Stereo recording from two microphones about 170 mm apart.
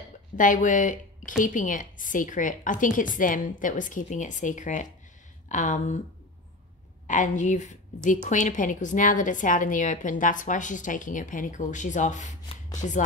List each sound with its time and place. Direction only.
0.4 s a woman's voice: 50° left (ahead or behind)
7.1 s a woman's voice: 45° left (ahead or behind)